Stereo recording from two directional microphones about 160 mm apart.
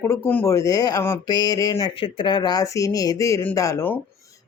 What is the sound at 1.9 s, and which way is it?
Speech, 30° left (ahead or behind).